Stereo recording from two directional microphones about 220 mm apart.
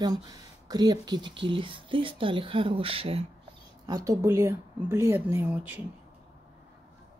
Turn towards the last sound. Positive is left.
turn(degrees=-10)  # may be behind; listen again after turning